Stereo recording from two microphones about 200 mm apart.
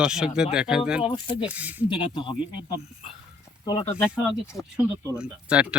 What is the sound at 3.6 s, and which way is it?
Speech, 15° left (ahead or behind).